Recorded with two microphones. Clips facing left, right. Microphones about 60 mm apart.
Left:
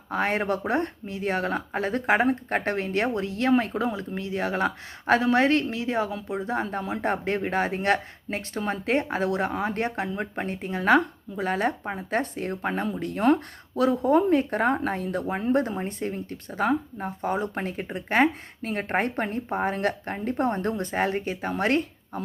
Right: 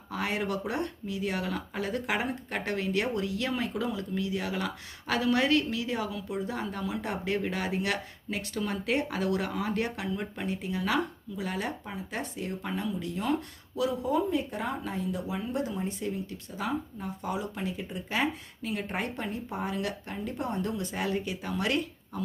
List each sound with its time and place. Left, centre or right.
0.1 s speech: left